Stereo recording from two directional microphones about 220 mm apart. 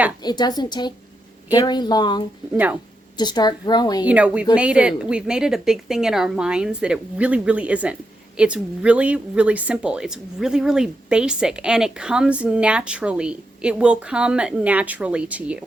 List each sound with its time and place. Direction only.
0.2 s a woman's voice: 20° left (ahead or behind)
4.0 s speech: 5° right (ahead or behind)